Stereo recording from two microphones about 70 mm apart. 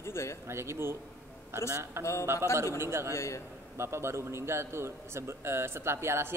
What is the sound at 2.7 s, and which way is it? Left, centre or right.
Speech, right.